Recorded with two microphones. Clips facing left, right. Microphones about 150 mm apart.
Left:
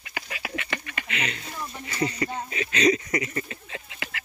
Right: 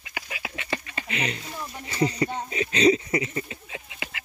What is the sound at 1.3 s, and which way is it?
Speech, 25° right (ahead or behind).